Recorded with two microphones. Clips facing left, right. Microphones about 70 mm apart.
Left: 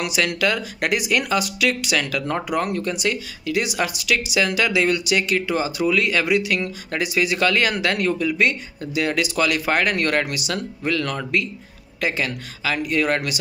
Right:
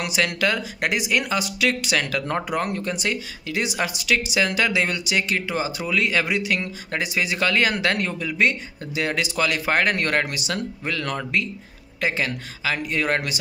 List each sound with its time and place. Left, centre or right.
0.0 s speech: right